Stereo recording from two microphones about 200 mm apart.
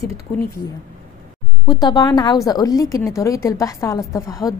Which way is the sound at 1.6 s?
20° left (ahead or behind).